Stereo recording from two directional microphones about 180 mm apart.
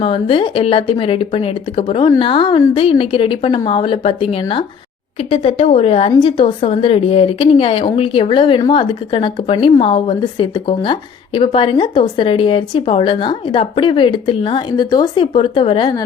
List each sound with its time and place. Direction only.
0.0 s a woman's voice: 30° left (ahead or behind)